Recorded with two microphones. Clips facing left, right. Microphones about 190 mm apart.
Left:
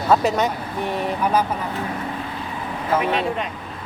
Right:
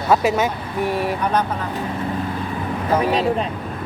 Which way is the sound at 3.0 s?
35° right (ahead or behind).